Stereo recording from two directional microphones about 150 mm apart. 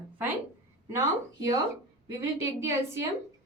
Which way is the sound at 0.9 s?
25° right (ahead or behind).